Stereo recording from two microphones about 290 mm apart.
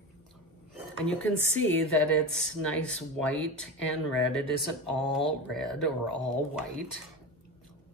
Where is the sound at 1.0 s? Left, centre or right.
Centre.